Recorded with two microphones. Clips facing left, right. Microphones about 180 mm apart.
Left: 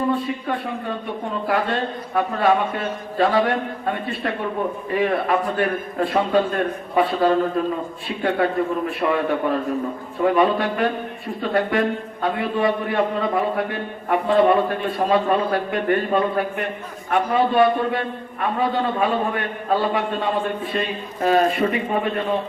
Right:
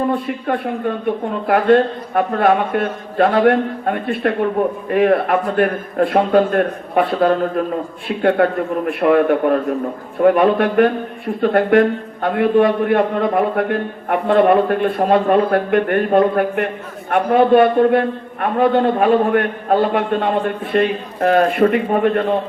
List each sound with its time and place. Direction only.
0.1 s a man's voice: 55° right (ahead or behind)